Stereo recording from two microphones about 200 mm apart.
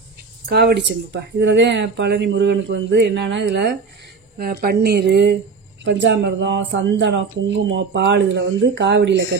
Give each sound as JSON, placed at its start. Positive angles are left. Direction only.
{"t": 0.5, "sound": "speech", "side_deg": -55}
{"t": 4.4, "sound": "a woman's voice", "side_deg": -50}